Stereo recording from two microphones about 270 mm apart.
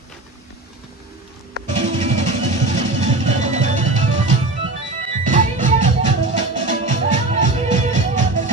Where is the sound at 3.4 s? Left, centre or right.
Right.